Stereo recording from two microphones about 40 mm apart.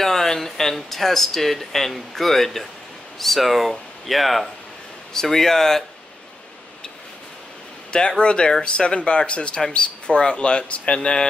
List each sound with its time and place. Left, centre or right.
0.0 s speech: centre
7.9 s speech: left